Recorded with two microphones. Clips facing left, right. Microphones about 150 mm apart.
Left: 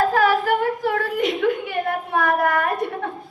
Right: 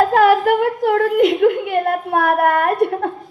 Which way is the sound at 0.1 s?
55° right (ahead or behind).